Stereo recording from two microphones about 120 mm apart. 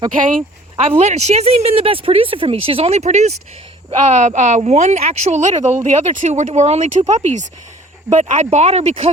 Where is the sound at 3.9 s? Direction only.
80° right.